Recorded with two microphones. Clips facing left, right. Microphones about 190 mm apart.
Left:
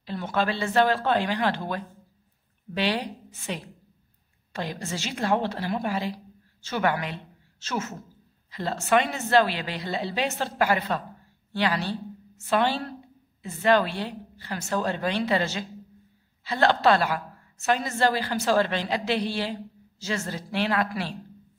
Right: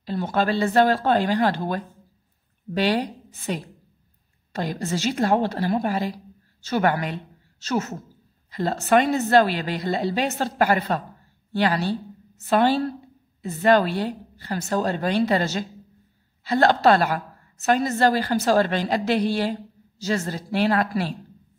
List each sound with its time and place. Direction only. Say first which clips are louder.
0.0 s a woman's voice: right 4 dB; 40° right (ahead or behind)